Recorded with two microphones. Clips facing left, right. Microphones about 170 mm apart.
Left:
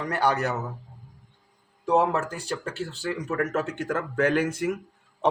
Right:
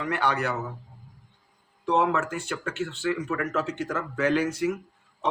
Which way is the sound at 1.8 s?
40° left (ahead or behind).